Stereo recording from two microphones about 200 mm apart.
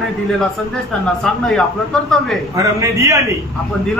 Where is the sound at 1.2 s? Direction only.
Centre (ahead or behind).